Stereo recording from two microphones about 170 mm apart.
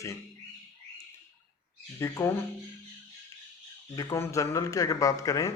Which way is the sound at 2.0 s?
15° left (ahead or behind).